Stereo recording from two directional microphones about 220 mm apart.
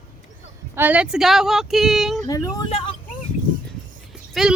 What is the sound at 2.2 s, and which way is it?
Speech, 15° left (ahead or behind).